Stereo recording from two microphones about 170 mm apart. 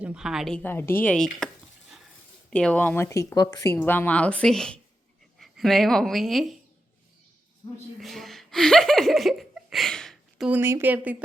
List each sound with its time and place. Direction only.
0.0 s speech: 5° right (ahead or behind)
2.5 s speech: 5° left (ahead or behind)
7.9 s laughter: centre (ahead or behind)
10.6 s speech: 15° right (ahead or behind)